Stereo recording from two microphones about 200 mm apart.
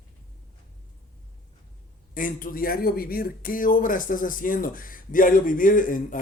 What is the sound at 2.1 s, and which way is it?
Speech, 45° left (ahead or behind).